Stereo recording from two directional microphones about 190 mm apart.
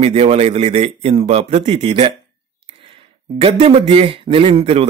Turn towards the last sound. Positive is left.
turn(degrees=-35)  # may be behind; listen again after turning